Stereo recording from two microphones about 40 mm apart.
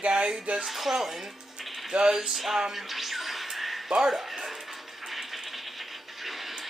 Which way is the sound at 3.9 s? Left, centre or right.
Centre.